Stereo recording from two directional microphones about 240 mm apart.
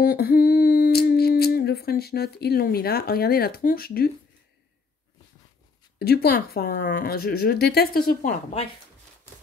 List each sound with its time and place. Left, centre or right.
0.0 s humming: left
5.9 s speech: left